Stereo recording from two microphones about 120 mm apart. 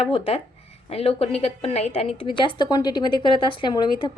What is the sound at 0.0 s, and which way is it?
A woman's voice, 55° left (ahead or behind).